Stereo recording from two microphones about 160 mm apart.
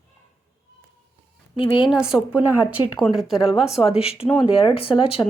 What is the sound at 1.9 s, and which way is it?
A woman's voice, 5° right (ahead or behind).